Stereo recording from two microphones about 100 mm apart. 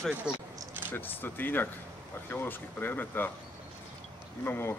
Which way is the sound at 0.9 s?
20° left (ahead or behind).